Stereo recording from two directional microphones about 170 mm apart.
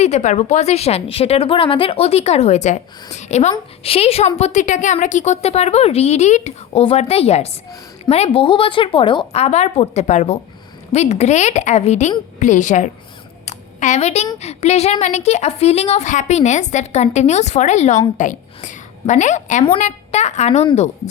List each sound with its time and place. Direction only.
0.0 s a woman's voice: 40° left (ahead or behind)
13.4 s a sound: 45° left (ahead or behind)
14.3 s a woman's voice: 40° left (ahead or behind)